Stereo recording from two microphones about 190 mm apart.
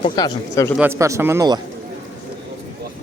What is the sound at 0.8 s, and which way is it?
Speech, 15° right (ahead or behind).